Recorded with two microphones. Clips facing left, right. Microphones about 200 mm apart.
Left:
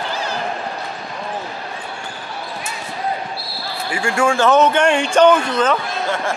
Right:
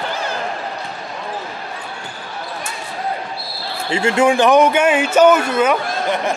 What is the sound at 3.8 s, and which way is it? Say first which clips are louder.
A man's voice: right 4 dB; 25° right (ahead or behind).